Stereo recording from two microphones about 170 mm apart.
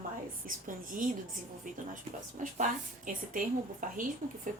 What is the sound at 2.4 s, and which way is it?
A woman's voice, 50° right (ahead or behind).